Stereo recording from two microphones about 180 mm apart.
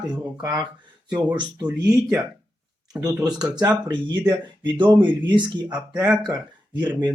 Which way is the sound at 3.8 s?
25° right (ahead or behind).